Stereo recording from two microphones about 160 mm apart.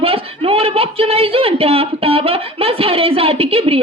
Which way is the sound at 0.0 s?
35° right (ahead or behind).